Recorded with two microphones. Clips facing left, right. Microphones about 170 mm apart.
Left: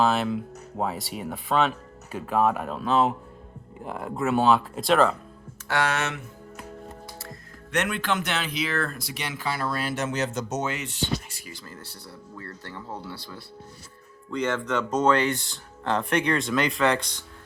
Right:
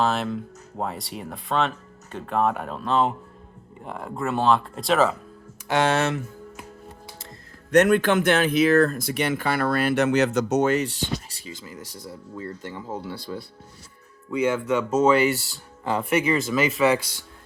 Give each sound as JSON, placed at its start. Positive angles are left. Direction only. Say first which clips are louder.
{"t": 0.0, "sound": "speech", "louder": "left 1 dB", "side_deg": 0}
{"t": 5.6, "sound": "speech", "louder": "right 5 dB", "side_deg": -25}
{"t": 7.7, "sound": "speech", "louder": "right 9 dB", "side_deg": -45}
{"t": 10.8, "sound": "speech", "louder": "right 4 dB", "side_deg": -35}
{"t": 11.5, "sound": "speech", "louder": "right 5 dB", "side_deg": -15}
{"t": 14.3, "sound": "speech", "louder": "right 4 dB", "side_deg": -10}